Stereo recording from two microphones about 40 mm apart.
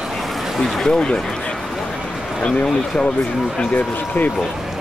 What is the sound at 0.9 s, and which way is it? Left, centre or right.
Speech, left.